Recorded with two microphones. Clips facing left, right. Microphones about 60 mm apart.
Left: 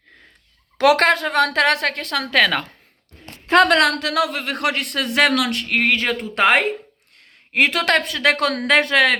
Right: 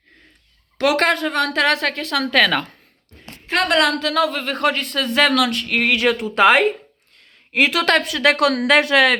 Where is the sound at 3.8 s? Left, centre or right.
Left.